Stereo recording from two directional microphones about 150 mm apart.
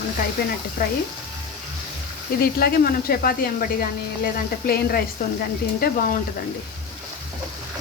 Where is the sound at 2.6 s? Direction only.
90° left.